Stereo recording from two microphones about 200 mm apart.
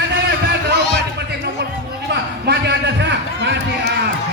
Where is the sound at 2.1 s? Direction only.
60° right (ahead or behind).